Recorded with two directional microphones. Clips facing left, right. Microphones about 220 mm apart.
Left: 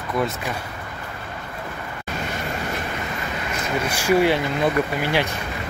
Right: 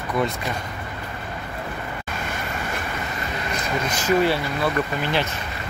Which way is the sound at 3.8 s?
10° left (ahead or behind).